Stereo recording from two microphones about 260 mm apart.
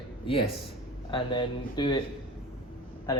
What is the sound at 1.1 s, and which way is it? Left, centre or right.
Speech, centre.